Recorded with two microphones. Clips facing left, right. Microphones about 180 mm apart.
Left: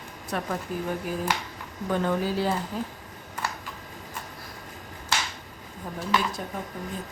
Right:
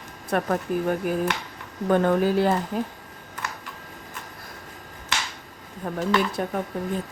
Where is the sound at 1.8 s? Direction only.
55° right (ahead or behind).